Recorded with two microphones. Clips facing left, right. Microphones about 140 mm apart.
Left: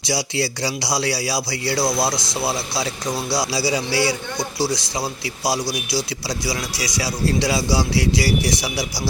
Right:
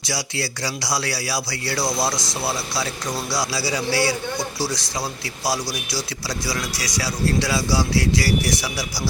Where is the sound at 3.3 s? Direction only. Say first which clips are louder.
Left 4 dB; 20° left (ahead or behind).